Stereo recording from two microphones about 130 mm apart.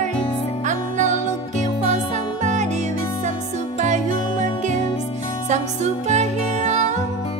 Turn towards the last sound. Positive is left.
turn(degrees=-60)  # may be behind; listen again after turning